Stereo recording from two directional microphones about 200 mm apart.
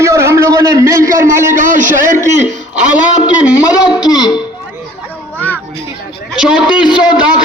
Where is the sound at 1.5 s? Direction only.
40° right (ahead or behind).